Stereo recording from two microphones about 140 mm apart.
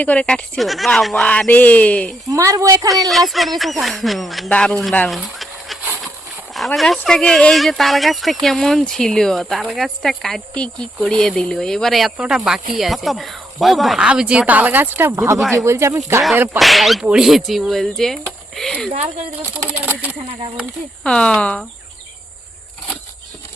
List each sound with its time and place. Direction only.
0.0 s speech: 10° left (ahead or behind)
2.3 s speech: 25° right (ahead or behind)
3.1 s speech: centre (ahead or behind)
6.7 s speech: centre (ahead or behind)
16.6 s speech: centre (ahead or behind)
18.9 s speech: 50° right (ahead or behind)
21.0 s speech: 5° left (ahead or behind)